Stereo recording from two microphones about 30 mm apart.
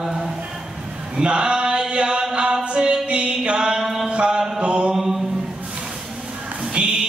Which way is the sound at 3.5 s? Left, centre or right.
Right.